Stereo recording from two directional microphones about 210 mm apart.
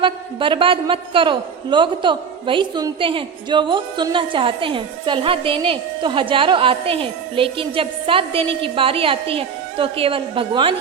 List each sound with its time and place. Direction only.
0.0 s a woman's voice: 25° right (ahead or behind)